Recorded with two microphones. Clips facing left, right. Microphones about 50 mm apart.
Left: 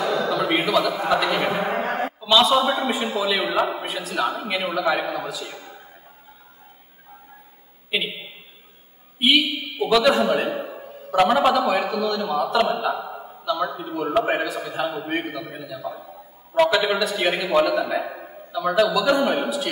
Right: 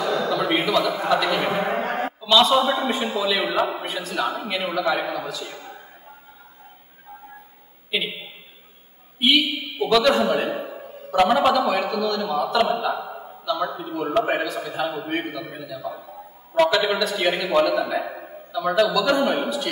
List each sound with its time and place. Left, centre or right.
0.1 s a sound: centre
1.0 s a man's voice: centre
7.9 s a man's voice: centre
9.2 s a man's voice: centre
15.8 s a man's voice: centre
16.5 s a man's voice: centre